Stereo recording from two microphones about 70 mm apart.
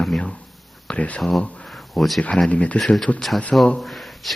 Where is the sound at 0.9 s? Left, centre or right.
Centre.